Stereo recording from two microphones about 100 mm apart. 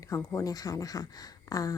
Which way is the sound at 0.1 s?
35° left (ahead or behind).